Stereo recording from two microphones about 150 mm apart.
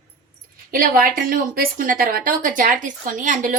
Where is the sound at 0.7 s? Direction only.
70° right (ahead or behind).